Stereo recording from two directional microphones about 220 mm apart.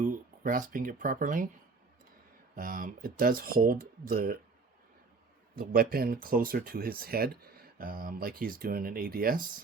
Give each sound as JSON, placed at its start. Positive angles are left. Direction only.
{"t": 0.0, "sound": "speech", "side_deg": -35}
{"t": 2.6, "sound": "speech", "side_deg": -40}
{"t": 5.5, "sound": "speech", "side_deg": -40}